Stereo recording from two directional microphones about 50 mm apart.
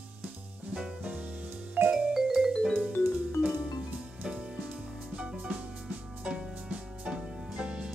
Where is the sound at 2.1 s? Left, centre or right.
Centre.